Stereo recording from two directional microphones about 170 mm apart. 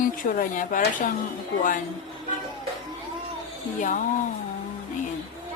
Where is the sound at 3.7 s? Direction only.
50° left (ahead or behind).